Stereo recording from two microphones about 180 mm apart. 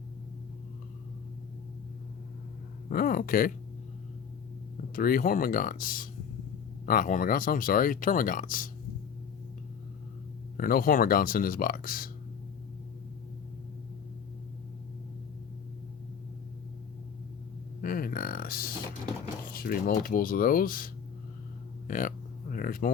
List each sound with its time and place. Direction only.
2.9 s speech: 55° left (ahead or behind)
4.9 s speech: 50° left (ahead or behind)
10.6 s speech: 55° left (ahead or behind)
17.8 s a sound: 50° left (ahead or behind)
19.5 s speech: 55° left (ahead or behind)
21.8 s a sound: 50° left (ahead or behind)